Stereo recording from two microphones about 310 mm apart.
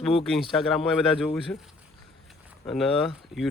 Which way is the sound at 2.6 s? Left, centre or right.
Centre.